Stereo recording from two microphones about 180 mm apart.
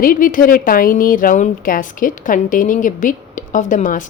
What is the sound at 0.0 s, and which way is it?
A woman's voice, 50° left (ahead or behind).